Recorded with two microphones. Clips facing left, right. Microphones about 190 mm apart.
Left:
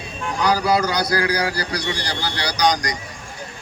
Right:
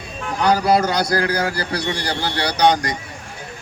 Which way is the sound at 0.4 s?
55° right (ahead or behind).